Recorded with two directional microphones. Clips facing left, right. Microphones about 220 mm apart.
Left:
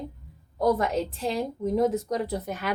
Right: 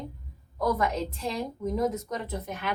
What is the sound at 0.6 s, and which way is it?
A woman's voice, 30° left (ahead or behind).